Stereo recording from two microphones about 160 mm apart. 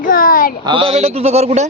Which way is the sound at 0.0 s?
60° left (ahead or behind).